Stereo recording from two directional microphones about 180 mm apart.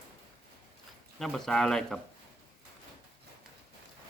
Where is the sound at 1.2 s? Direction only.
Centre (ahead or behind).